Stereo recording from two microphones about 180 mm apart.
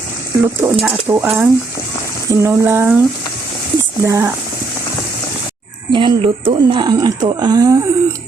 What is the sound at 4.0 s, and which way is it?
Speech, 15° right (ahead or behind).